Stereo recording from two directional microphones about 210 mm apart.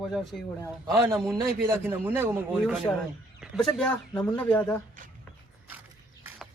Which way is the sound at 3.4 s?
Centre (ahead or behind).